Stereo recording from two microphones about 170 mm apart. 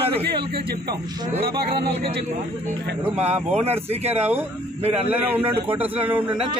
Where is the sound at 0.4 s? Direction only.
70° right (ahead or behind).